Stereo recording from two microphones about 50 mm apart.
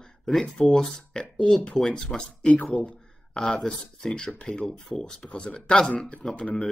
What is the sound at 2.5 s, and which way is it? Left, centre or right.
Speech, left.